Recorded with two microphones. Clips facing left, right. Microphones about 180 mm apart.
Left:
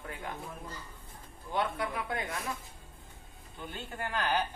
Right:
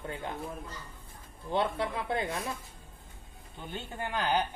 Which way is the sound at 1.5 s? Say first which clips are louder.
Right 3 dB; 25° right (ahead or behind).